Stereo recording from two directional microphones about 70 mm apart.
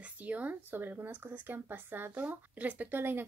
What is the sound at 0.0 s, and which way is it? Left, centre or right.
Speech, right.